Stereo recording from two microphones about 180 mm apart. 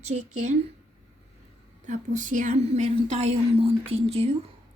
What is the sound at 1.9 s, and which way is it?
Speech, 45° right (ahead or behind).